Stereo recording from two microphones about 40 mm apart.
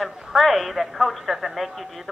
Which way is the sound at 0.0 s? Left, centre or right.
Centre.